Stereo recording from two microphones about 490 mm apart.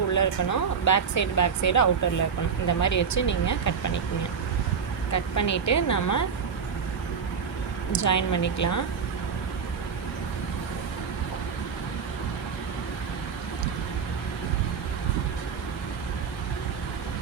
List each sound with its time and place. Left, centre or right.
0.1 s speech: left
5.1 s speech: left
7.9 s speech: left